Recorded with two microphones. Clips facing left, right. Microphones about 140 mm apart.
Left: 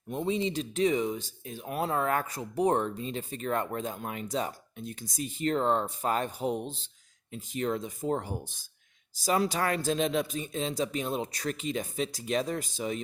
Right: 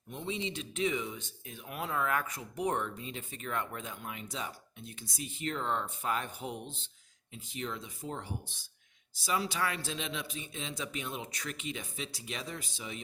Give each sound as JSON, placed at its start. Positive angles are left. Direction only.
{"t": 0.1, "sound": "speech", "side_deg": 40}